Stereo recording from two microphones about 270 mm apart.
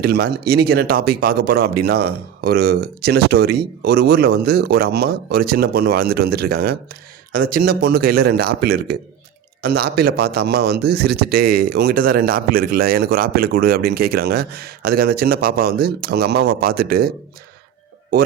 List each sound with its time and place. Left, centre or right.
0.0 s a man's voice: right